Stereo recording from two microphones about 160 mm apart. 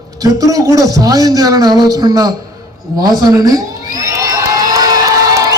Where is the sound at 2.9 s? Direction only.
25° right (ahead or behind).